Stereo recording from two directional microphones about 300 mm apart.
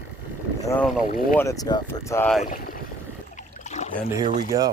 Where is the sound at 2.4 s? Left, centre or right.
Left.